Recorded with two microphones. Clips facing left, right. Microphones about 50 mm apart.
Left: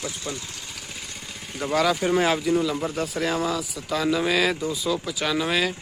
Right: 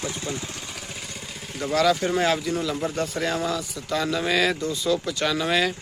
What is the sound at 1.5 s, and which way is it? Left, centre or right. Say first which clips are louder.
Speech: right 1 dB; centre.